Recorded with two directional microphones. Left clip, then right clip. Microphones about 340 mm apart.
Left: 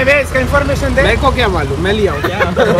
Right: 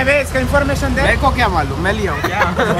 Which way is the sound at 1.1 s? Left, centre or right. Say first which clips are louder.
Left 2 dB; centre.